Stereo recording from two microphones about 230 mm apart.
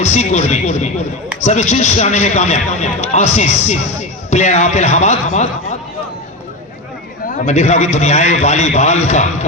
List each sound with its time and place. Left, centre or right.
0.0 s speech: left
7.3 s speech: left